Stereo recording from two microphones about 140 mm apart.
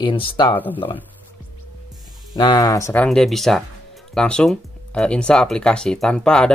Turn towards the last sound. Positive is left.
turn(degrees=5)  # may be behind; listen again after turning